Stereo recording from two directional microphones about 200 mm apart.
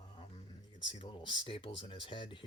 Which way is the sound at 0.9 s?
25° left (ahead or behind).